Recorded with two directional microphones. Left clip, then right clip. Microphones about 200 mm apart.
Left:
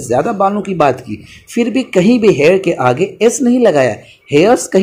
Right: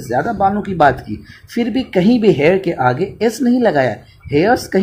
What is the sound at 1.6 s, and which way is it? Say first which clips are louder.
Speech: left 3 dB; 10° right (ahead or behind).